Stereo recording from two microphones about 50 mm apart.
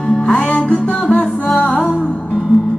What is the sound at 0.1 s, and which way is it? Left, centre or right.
Music, centre.